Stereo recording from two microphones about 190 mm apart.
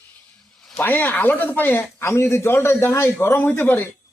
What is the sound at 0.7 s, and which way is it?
Speech, 10° left (ahead or behind).